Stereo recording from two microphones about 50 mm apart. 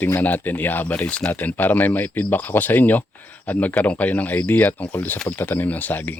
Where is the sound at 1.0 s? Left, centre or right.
Centre.